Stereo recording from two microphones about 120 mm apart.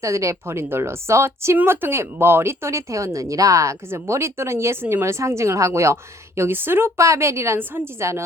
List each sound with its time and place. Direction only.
0.0 s a woman's voice: 25° right (ahead or behind)